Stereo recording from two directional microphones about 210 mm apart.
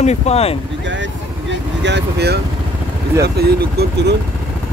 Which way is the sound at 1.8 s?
55° right (ahead or behind).